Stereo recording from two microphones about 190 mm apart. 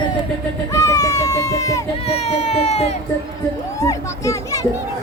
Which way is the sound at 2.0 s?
35° left (ahead or behind).